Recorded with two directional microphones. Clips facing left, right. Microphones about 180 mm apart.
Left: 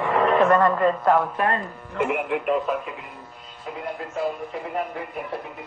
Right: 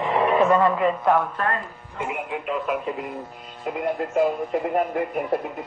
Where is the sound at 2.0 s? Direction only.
65° left (ahead or behind).